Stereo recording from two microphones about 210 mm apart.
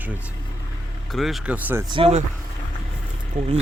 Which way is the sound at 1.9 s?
30° right (ahead or behind).